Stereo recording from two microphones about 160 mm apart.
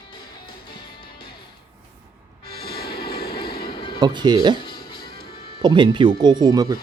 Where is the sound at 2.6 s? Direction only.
75° left (ahead or behind).